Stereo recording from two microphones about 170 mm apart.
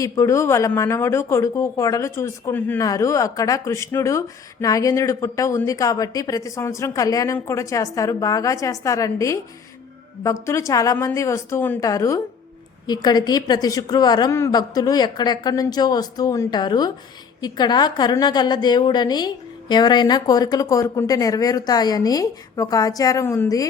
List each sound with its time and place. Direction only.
0.0 s a woman's voice: 20° left (ahead or behind)